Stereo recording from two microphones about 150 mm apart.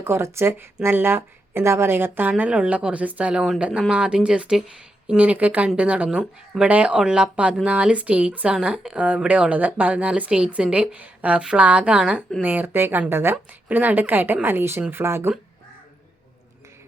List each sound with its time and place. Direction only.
0.0 s speech: 15° right (ahead or behind)